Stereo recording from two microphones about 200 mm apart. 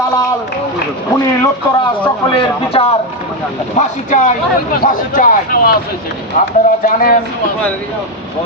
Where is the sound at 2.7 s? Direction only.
30° left (ahead or behind); by 5.7 s 45° left (ahead or behind).